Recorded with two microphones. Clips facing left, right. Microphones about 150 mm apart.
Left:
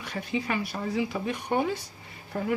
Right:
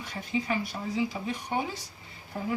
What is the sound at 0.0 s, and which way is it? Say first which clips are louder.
A woman's voice: left 1 dB; 65° left (ahead or behind).